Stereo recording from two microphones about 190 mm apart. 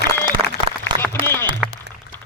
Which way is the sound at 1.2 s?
15° left (ahead or behind).